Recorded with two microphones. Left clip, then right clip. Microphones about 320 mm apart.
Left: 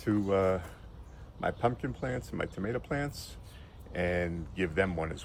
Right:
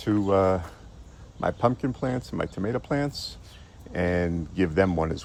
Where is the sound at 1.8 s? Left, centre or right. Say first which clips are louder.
Right 7 dB; centre.